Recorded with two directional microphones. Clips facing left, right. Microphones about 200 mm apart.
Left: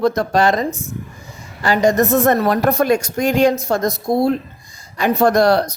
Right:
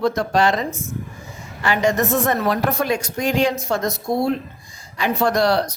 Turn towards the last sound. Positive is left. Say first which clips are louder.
# left 5 dB
turn(degrees=45)  # may be behind; listen again after turning